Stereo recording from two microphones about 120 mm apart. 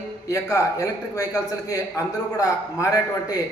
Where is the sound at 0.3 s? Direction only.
25° left (ahead or behind).